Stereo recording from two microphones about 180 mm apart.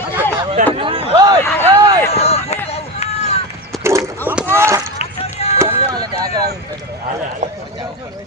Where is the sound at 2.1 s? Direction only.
35° left (ahead or behind).